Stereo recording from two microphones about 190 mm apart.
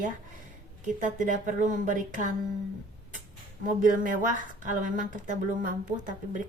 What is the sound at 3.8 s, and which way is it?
Speech, 45° right (ahead or behind).